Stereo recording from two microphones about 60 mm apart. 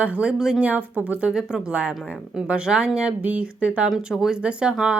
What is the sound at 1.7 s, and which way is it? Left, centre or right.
A woman's voice, centre.